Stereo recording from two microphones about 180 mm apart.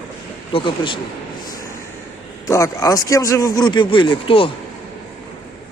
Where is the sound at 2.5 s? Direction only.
15° left (ahead or behind).